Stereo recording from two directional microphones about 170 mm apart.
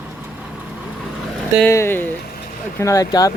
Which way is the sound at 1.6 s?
15° left (ahead or behind).